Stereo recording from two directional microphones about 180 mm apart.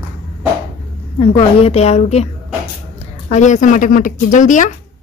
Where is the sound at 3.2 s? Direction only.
40° left (ahead or behind).